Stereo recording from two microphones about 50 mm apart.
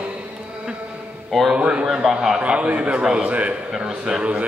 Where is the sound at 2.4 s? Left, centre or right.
Right.